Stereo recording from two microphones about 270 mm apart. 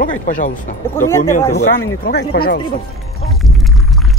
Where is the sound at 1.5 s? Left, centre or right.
Left.